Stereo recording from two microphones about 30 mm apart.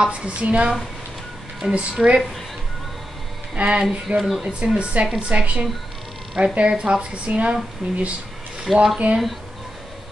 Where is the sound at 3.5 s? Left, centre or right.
Right.